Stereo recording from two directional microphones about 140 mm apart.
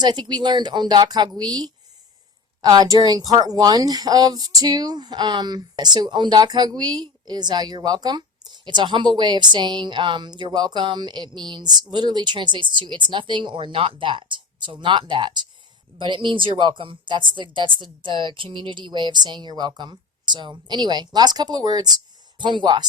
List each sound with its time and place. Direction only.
0.0 s a woman's voice: 30° right (ahead or behind)